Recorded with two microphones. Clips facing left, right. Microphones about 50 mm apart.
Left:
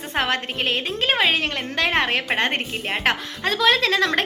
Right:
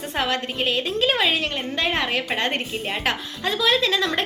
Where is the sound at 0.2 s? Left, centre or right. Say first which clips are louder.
Left 1 dB; left.